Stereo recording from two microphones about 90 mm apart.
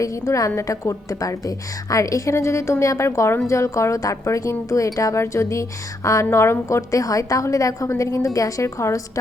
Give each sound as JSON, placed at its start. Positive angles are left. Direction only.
{"t": 0.0, "sound": "a woman's voice", "side_deg": 40}